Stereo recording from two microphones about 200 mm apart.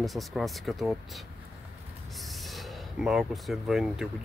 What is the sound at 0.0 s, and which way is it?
Speech, centre (ahead or behind).